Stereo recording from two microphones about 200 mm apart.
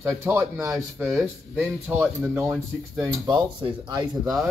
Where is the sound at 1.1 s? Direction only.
Centre (ahead or behind).